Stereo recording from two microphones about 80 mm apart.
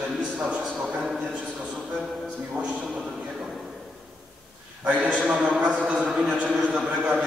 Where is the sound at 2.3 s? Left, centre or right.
Centre.